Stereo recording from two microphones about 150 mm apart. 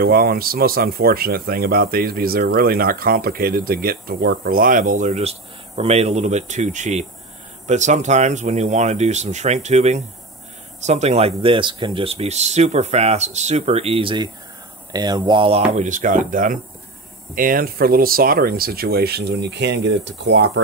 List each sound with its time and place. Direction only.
0.0 s speech: 90° right; by 16.5 s 60° right (ahead or behind)
17.4 s speech: 70° right (ahead or behind); by 19.3 s 90° right